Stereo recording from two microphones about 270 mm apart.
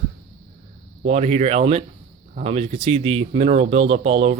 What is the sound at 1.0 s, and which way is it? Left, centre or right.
Speech, right.